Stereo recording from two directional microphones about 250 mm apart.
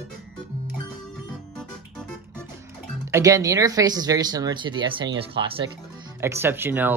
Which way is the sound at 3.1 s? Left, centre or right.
Centre.